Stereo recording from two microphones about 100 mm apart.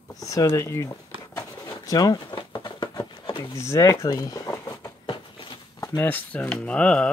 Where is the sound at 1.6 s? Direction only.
35° left (ahead or behind).